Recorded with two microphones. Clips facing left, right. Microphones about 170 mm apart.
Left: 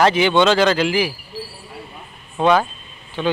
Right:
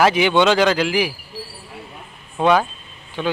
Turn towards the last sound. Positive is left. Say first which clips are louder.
# left 2 dB
turn(degrees=-10)  # may be behind; listen again after turning